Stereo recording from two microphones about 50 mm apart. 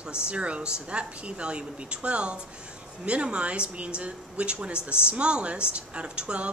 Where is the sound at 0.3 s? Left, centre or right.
Right.